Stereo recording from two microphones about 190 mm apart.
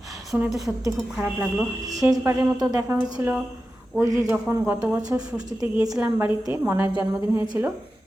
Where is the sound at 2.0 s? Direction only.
20° right (ahead or behind).